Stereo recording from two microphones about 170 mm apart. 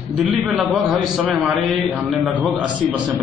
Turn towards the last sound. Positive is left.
turn(degrees=-5)  # may be behind; listen again after turning